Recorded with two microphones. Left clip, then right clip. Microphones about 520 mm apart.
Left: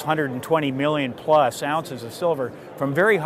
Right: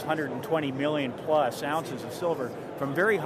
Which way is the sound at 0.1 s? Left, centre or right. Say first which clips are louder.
Left 7 dB; left.